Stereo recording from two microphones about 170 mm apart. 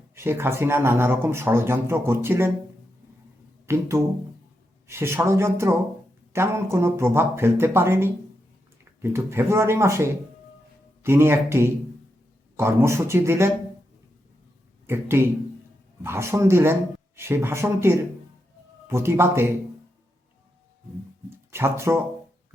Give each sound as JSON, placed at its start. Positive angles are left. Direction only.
{"t": 0.1, "sound": "speech", "side_deg": -15}
{"t": 3.7, "sound": "speech", "side_deg": -15}
{"t": 14.8, "sound": "speech", "side_deg": -15}
{"t": 21.5, "sound": "speech", "side_deg": -15}